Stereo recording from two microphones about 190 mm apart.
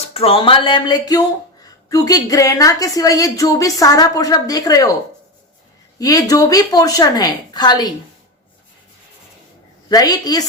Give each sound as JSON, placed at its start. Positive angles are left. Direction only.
{"t": 0.1, "sound": "a woman's voice", "side_deg": 30}
{"t": 6.0, "sound": "a woman's voice", "side_deg": 20}
{"t": 9.9, "sound": "a woman's voice", "side_deg": 20}